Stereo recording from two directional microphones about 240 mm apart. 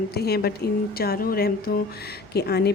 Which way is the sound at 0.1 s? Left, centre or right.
Left.